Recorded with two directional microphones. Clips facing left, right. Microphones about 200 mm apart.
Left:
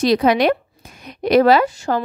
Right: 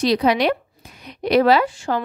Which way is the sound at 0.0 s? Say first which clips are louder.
Left 3 dB; 50° left (ahead or behind).